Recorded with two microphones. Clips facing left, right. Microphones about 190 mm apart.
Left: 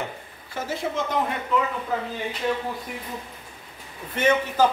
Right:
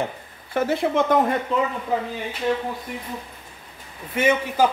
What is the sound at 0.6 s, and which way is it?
Speech, 60° right (ahead or behind).